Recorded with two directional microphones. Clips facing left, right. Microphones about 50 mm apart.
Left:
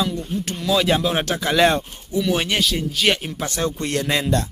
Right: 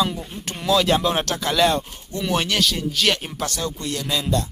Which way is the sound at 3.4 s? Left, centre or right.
Left.